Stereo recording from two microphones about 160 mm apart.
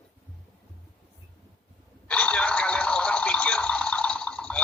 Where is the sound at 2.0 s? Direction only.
5° left (ahead or behind).